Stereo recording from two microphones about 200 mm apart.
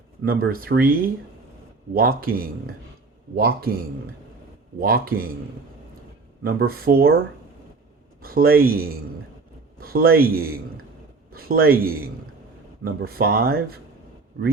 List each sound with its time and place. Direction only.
0.3 s speech: 50° right (ahead or behind)
4.8 s speech: 45° right (ahead or behind)
6.4 s speech: 50° right (ahead or behind)
8.2 s speech: 45° right (ahead or behind)